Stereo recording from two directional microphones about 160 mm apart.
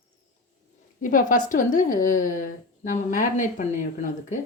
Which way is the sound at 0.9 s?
55° left (ahead or behind).